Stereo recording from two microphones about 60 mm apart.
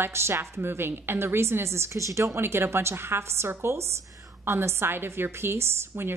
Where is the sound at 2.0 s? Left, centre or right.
Right.